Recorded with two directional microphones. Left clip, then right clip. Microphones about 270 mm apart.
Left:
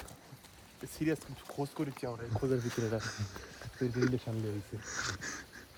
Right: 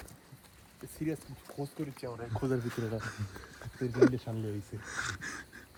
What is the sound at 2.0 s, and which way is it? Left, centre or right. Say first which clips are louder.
Speech: left 1 dB; left.